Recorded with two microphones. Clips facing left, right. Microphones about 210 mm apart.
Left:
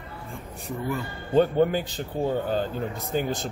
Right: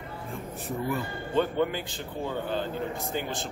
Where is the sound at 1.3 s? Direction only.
45° left (ahead or behind).